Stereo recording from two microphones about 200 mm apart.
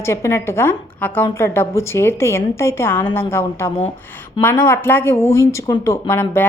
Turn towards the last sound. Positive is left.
turn(degrees=10)  # may be behind; listen again after turning